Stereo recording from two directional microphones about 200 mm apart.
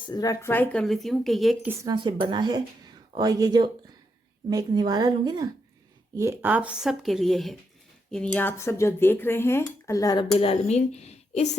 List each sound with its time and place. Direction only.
0.0 s speech: 20° left (ahead or behind); by 1.7 s centre (ahead or behind)
1.8 s speech: 20° right (ahead or behind); by 10.2 s 20° left (ahead or behind)
10.3 s speech: 30° left (ahead or behind)